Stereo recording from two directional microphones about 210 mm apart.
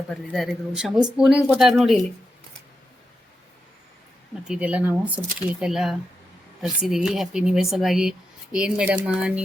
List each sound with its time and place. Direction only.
0.1 s speech: centre (ahead or behind)
4.4 s speech: 5° right (ahead or behind)